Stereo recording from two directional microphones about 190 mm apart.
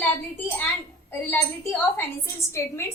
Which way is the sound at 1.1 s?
10° left (ahead or behind).